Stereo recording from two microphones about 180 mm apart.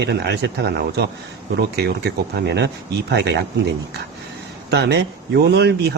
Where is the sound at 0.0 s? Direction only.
70° right (ahead or behind).